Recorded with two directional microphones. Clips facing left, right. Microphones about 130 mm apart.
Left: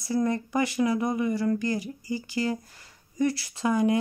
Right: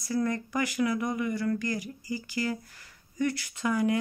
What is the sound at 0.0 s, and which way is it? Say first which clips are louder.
Speech: left 3 dB; 25° left (ahead or behind).